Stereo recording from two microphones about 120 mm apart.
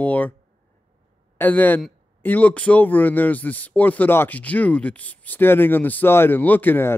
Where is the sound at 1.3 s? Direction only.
15° left (ahead or behind).